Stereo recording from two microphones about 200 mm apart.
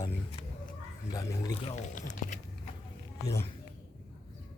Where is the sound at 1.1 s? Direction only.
15° left (ahead or behind).